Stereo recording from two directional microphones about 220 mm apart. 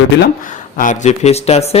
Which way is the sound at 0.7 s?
35° left (ahead or behind).